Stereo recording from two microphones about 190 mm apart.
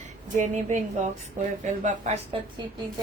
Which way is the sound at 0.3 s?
40° right (ahead or behind).